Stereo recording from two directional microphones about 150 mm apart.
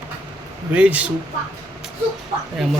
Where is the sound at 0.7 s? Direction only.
10° right (ahead or behind).